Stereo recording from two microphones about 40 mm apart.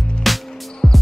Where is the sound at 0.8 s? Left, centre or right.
Centre.